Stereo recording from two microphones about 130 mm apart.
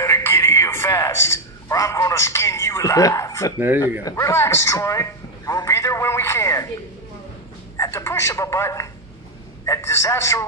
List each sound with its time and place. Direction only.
0.0 s a sound: 20° left (ahead or behind)
3.5 s speech: 15° right (ahead or behind)
4.0 s a man's voice: 20° left (ahead or behind)
7.7 s a man's voice: 20° left (ahead or behind)